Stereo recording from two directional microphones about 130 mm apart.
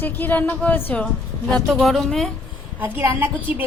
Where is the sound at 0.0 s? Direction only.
15° left (ahead or behind).